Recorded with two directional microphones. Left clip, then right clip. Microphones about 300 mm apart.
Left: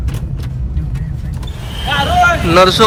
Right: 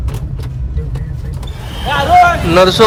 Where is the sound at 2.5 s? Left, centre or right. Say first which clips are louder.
Even; centre.